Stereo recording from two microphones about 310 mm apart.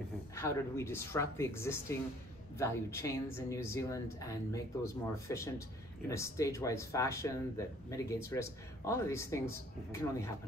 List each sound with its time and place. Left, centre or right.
0.4 s speech: centre